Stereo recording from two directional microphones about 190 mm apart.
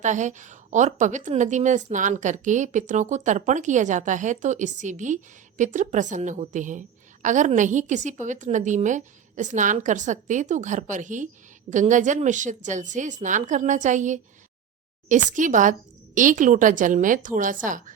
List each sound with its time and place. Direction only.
0.0 s a woman's voice: 40° right (ahead or behind)